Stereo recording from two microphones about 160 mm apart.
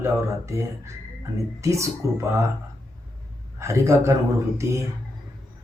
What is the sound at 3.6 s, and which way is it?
Speech, 20° right (ahead or behind).